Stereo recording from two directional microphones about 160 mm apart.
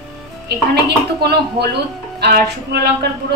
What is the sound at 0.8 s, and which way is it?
A woman's voice, 90° right.